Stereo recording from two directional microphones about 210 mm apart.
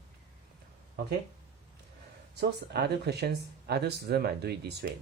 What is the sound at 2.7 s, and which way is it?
Speech, 50° right (ahead or behind).